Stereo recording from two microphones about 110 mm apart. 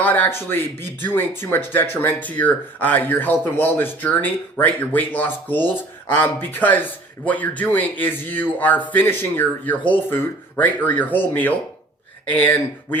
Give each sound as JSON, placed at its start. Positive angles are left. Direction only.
{"t": 0.0, "sound": "speech", "side_deg": 15}